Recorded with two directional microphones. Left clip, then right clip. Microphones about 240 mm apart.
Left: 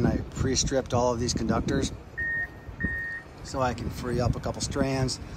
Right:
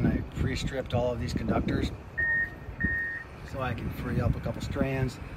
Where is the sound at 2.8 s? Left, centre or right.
Left.